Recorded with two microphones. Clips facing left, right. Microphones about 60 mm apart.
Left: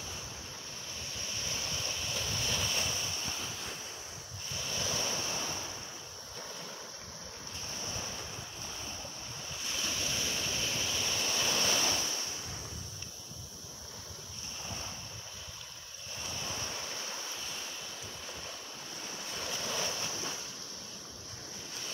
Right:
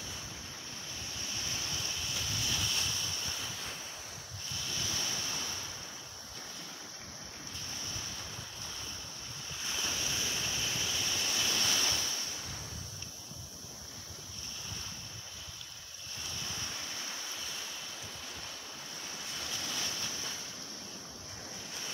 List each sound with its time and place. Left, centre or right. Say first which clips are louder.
1.4 s waves: left 2 dB; centre
4.6 s waves: left 3 dB; centre
7.8 s waves: left 3 dB; centre
9.7 s waves: even; centre
10.2 s waterfall: left 1 dB; centre
10.5 s waves: left 1 dB; centre
16.3 s waves: left 3 dB; centre
19.0 s waves: left 3 dB; centre